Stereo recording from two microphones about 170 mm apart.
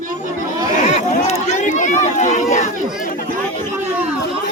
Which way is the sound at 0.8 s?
45° left (ahead or behind).